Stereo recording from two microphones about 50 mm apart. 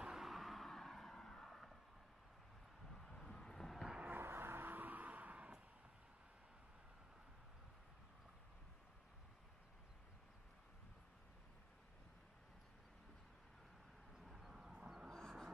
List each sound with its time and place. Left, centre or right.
0.2 s vehicle: centre
2.9 s vehicle: centre
4.1 s vehicle: right
14.1 s a sound: centre
15.0 s vehicle: centre